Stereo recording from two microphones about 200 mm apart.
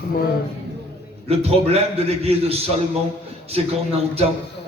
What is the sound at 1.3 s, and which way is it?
A man's voice, 30° right (ahead or behind).